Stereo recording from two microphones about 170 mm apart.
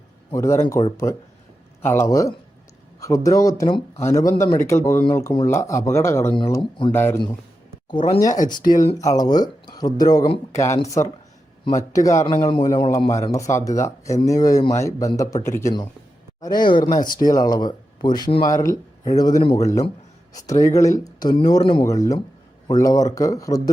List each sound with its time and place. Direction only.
0.3 s a man's voice: 15° left (ahead or behind)
6.5 s speech: 30° left (ahead or behind)
6.9 s a man's voice: 15° left (ahead or behind)
7.9 s speech: 30° left (ahead or behind)
12.2 s a man's voice: 30° left (ahead or behind)
21.8 s speech: 20° left (ahead or behind)